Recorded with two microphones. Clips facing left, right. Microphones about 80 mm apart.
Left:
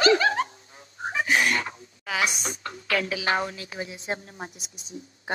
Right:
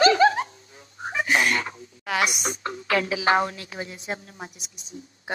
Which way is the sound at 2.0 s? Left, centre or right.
Centre.